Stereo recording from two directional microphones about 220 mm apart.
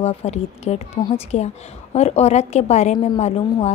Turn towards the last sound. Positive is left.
turn(degrees=30)  # may be behind; listen again after turning